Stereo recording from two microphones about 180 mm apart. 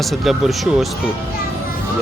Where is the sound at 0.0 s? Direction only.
Centre (ahead or behind).